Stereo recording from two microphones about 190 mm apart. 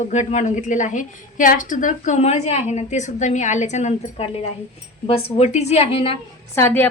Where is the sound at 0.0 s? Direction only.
40° left (ahead or behind).